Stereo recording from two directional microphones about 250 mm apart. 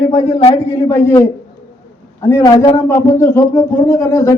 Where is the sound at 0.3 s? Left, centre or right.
Left.